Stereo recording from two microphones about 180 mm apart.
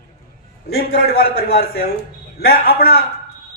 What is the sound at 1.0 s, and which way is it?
Speech, 60° left (ahead or behind).